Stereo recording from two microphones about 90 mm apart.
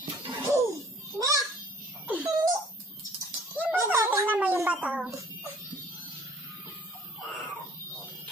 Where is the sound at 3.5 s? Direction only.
20° right (ahead or behind).